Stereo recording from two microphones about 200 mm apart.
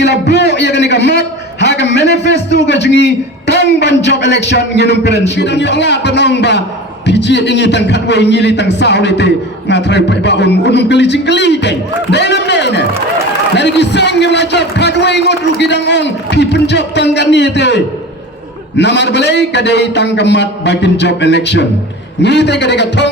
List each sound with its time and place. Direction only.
0.0 s a man's voice: 60° left (ahead or behind)